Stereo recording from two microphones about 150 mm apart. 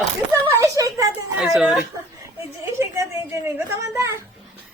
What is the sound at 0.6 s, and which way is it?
Speech, 25° right (ahead or behind).